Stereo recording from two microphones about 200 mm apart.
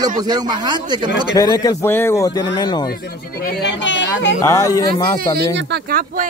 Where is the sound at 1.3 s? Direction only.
20° left (ahead or behind).